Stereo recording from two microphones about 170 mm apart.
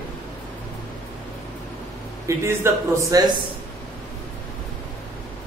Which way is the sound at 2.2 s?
15° right (ahead or behind).